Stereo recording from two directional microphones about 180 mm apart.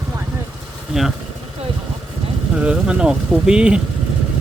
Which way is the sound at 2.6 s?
5° right (ahead or behind).